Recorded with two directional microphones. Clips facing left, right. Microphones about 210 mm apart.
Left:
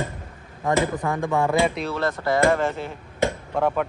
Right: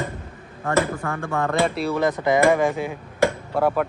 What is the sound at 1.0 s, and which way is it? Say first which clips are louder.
Speech: left 3 dB; 15° left (ahead or behind).